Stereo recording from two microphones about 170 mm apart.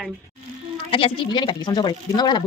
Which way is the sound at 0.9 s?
30° left (ahead or behind).